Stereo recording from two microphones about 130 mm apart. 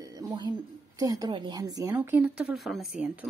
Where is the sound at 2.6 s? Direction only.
Centre (ahead or behind).